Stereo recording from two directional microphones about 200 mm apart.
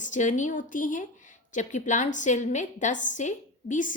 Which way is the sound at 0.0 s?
40° left (ahead or behind).